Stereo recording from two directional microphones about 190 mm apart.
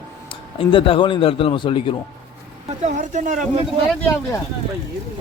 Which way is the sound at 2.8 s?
40° right (ahead or behind).